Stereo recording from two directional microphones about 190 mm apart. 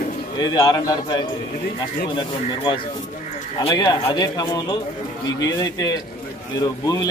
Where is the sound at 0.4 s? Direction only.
20° left (ahead or behind).